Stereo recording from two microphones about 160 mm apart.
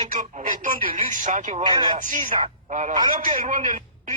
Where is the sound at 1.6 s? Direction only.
30° right (ahead or behind); by 4.1 s 55° right (ahead or behind).